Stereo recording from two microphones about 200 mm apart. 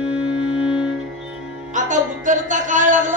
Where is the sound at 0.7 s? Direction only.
5° right (ahead or behind).